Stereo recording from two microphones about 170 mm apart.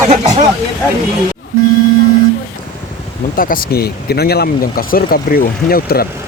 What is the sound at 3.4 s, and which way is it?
Speech, 55° left (ahead or behind).